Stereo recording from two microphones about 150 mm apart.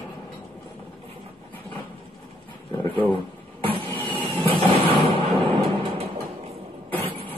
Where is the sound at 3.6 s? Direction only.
35° right (ahead or behind).